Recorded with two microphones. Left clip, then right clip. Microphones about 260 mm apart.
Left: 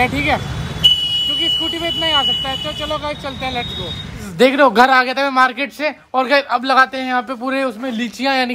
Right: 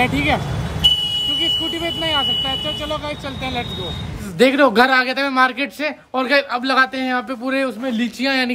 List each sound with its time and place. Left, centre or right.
0.0 s speech: centre
0.8 s vehicle: right
1.6 s a man's voice: centre